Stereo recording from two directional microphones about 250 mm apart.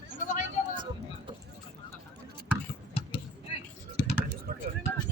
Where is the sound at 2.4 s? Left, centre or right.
Centre.